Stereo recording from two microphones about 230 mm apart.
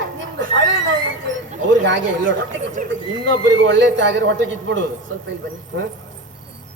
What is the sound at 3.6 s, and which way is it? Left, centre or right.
A man's voice, right.